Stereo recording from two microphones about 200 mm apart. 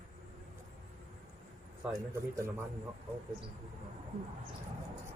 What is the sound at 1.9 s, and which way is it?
Speech, 15° right (ahead or behind).